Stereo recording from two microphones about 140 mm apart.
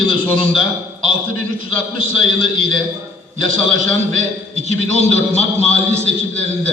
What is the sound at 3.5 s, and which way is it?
A man's voice, 60° right (ahead or behind).